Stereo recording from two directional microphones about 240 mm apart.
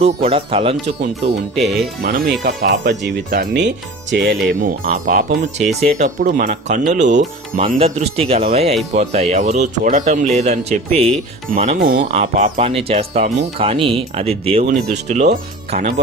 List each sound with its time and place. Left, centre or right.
0.0 s speech: right
1.0 s speech: right
4.4 s speech: right
11.8 s speech: right
12.1 s speech: right